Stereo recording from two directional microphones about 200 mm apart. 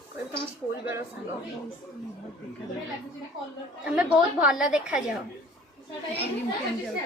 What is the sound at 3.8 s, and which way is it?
A woman's voice, 5° right (ahead or behind).